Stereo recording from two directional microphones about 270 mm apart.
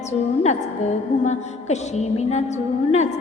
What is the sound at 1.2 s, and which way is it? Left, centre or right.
A woman's voice, left.